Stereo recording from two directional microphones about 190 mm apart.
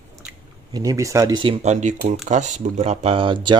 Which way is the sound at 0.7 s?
15° right (ahead or behind).